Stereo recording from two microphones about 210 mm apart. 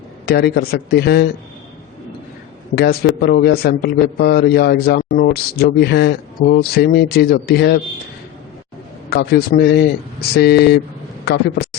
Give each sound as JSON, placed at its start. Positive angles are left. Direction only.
{"t": 0.3, "sound": "a man's voice", "side_deg": 50}
{"t": 2.7, "sound": "a man's voice", "side_deg": 50}
{"t": 9.0, "sound": "a man's voice", "side_deg": 50}